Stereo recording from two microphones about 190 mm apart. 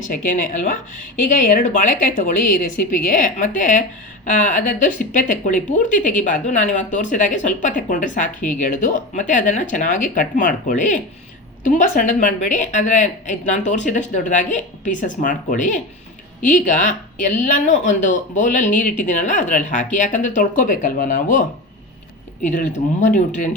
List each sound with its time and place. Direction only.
0.0 s speech: 45° left (ahead or behind)
23.0 s speech: 40° left (ahead or behind)